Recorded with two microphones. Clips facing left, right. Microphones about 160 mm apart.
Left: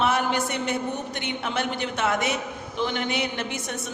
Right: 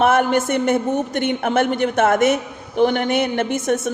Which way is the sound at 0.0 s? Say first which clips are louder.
Right 8 dB; 50° right (ahead or behind).